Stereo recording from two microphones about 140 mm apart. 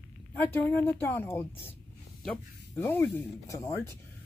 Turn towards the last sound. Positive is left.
turn(degrees=20)  # may be behind; listen again after turning